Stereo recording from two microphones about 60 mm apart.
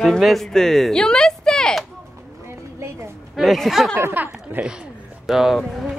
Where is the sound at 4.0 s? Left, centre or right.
Right.